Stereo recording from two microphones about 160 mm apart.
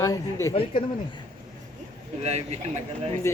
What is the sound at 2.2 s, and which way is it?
Speech, 45° right (ahead or behind).